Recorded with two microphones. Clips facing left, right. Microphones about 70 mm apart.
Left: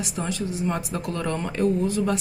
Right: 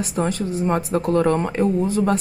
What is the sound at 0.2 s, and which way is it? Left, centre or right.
Speech, right.